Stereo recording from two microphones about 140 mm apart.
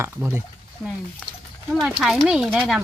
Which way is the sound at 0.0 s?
15° right (ahead or behind).